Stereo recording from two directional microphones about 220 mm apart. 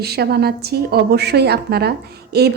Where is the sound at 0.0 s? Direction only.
45° right (ahead or behind).